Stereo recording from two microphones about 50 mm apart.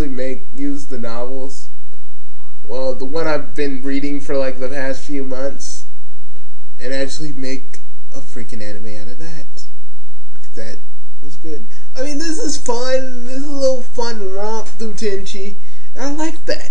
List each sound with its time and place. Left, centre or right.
0.0 s a sound: centre
2.7 s speech: centre
6.8 s speech: centre